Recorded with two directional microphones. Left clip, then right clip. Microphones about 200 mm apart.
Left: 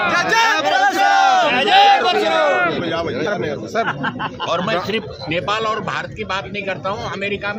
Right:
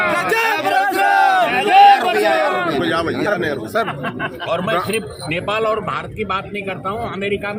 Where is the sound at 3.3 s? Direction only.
45° right (ahead or behind).